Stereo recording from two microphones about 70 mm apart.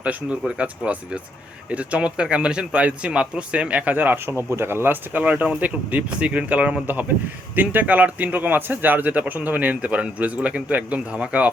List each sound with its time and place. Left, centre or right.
0.0 s a man's voice: centre